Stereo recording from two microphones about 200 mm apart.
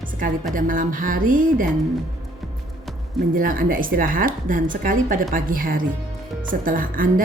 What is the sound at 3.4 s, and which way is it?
Speech, 45° right (ahead or behind).